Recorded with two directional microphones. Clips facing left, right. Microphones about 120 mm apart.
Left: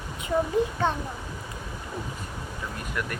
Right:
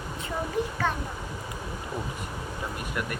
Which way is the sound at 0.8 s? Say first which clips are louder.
Even; 20° left (ahead or behind).